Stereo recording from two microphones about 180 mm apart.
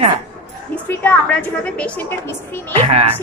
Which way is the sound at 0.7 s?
10° left (ahead or behind).